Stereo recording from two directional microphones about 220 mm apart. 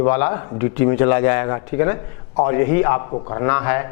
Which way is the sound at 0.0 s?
15° left (ahead or behind).